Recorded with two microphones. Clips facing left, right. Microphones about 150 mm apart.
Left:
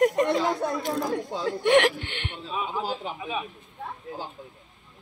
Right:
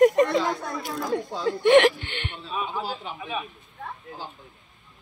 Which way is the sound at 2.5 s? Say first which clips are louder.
Left 1 dB; 20° left (ahead or behind).